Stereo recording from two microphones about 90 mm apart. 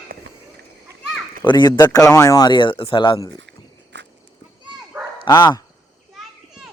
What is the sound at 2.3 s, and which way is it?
Speech, 55° left (ahead or behind).